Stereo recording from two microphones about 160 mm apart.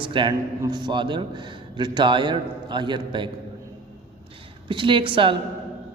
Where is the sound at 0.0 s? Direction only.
30° right (ahead or behind).